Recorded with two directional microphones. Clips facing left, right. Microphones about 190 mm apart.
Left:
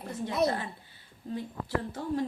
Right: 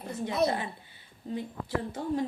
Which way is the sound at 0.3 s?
15° right (ahead or behind).